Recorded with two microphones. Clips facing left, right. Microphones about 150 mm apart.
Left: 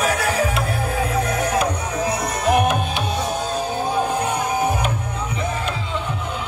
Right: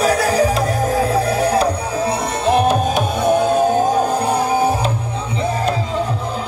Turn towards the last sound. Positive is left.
turn(degrees=-30)  # may be behind; listen again after turning